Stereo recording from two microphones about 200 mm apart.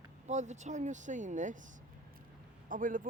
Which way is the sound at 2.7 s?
40° right (ahead or behind).